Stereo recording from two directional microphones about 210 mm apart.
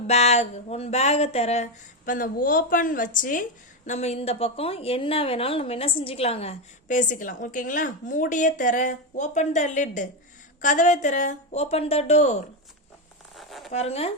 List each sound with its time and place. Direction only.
0.1 s a woman's voice: 30° left (ahead or behind)
13.3 s zipper: centre (ahead or behind)
13.7 s speech: 30° left (ahead or behind)